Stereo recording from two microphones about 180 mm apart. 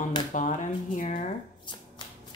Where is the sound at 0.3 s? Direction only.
45° left (ahead or behind).